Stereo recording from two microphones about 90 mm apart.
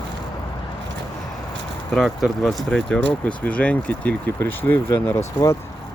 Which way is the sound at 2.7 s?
10° left (ahead or behind).